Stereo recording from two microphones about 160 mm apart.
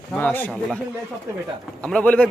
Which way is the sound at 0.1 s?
10° left (ahead or behind).